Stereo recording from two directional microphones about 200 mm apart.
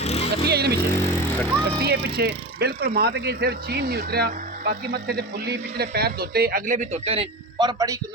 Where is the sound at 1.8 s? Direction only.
55° right (ahead or behind).